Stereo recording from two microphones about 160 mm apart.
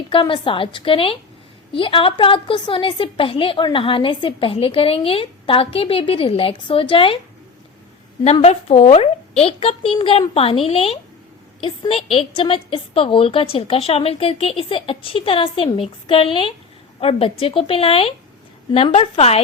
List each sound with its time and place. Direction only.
0.1 s a woman's voice: 30° left (ahead or behind)
8.2 s a woman's voice: 40° left (ahead or behind)